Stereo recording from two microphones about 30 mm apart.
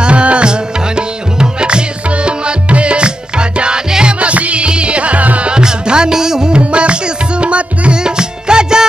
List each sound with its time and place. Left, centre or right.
0.0 s music: right
0.5 s music: right
4.0 s music: right
4.6 s music: right
5.5 s music: right
6.5 s music: right
8.0 s music: right